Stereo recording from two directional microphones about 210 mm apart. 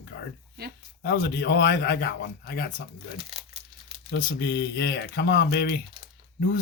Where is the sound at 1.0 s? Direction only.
50° left (ahead or behind).